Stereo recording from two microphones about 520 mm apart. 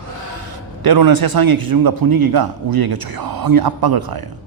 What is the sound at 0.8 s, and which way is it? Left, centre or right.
A man's voice, right.